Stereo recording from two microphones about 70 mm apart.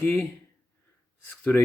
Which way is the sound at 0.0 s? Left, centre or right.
Left.